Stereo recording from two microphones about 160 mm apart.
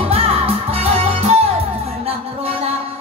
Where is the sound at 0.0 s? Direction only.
40° right (ahead or behind).